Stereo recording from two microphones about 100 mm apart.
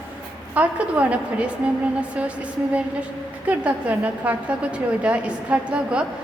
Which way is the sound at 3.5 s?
15° right (ahead or behind).